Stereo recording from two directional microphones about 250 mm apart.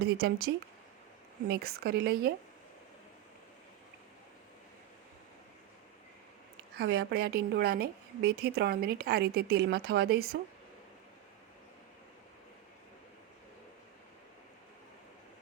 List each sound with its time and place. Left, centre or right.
0.0 s a woman's voice: right
6.7 s a woman's voice: right